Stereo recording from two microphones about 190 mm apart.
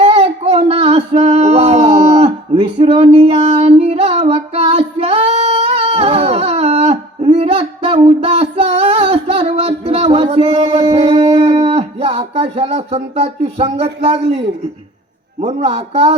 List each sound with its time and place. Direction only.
0.0 s male singing: 35° right (ahead or behind)
14.0 s a man's voice: 35° right (ahead or behind)